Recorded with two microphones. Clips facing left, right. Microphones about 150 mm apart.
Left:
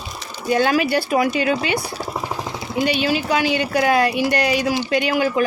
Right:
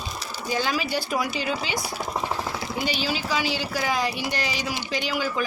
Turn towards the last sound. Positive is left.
turn(degrees=65)  # may be behind; listen again after turning